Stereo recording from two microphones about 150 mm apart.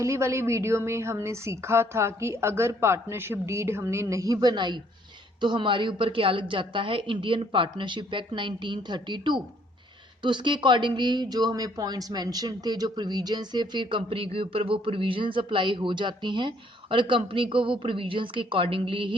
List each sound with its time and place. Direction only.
0.0 s a woman's voice: 20° right (ahead or behind)